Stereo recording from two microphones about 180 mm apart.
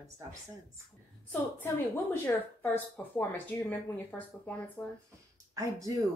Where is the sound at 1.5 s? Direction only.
10° left (ahead or behind).